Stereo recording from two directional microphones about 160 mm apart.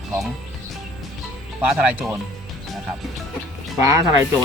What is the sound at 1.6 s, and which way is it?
Speech, 10° right (ahead or behind).